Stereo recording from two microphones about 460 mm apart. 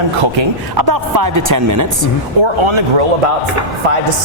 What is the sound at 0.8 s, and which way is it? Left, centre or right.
Speech, right.